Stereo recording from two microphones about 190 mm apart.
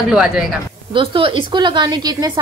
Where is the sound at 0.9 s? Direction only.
25° right (ahead or behind).